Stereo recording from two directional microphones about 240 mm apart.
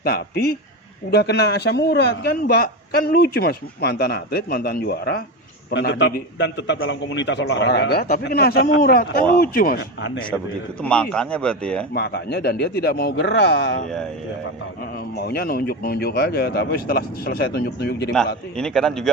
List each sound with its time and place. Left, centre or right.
0.0 s a man's voice: left
10.8 s speech: centre
11.9 s a man's voice: left
15.1 s a man's voice: left
18.5 s speech: centre